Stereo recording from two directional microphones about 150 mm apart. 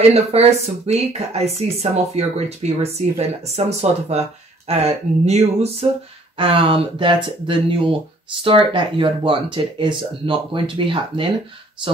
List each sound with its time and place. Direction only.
0.1 s speech: 45° right (ahead or behind)